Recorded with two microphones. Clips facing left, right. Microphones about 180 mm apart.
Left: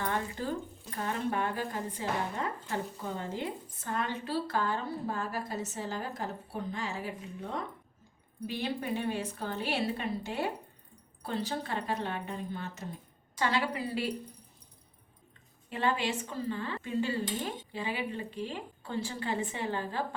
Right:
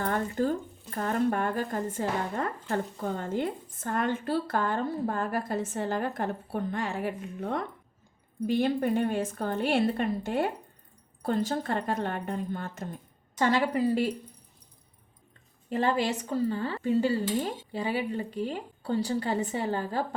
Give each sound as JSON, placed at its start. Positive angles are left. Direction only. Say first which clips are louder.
{"t": 0.0, "sound": "speech", "louder": "right 6 dB", "side_deg": -45}
{"t": 8.4, "sound": "speech", "louder": "right 8 dB", "side_deg": -50}
{"t": 15.7, "sound": "speech", "louder": "right 4 dB", "side_deg": -40}